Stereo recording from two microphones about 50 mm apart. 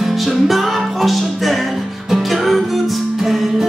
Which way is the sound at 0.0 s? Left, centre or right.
Centre.